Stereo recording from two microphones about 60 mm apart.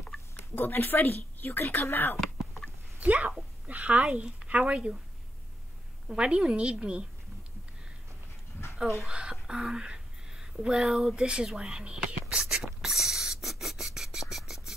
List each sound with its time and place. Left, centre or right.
0.6 s speech: left
2.1 s a sound: centre
3.0 s a woman's voice: right
6.0 s a woman's voice: centre
9.0 s speech: centre
12.4 s a sound: centre